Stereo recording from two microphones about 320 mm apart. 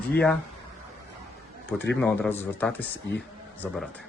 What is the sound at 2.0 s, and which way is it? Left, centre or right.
A man's voice, centre.